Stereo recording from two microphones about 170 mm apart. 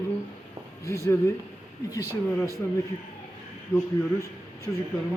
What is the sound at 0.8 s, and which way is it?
A man's voice, 15° left (ahead or behind).